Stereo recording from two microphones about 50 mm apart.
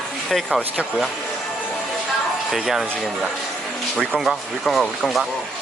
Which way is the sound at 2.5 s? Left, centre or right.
Centre.